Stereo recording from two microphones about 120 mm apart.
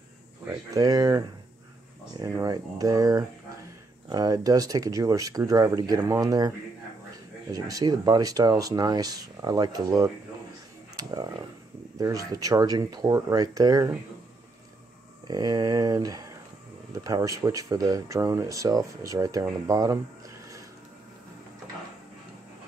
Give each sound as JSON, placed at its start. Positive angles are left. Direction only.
{"t": 0.5, "sound": "speech", "side_deg": -30}
{"t": 7.5, "sound": "speech", "side_deg": -30}
{"t": 11.0, "sound": "a sound", "side_deg": -35}
{"t": 12.0, "sound": "speech", "side_deg": -30}
{"t": 15.2, "sound": "speech", "side_deg": -35}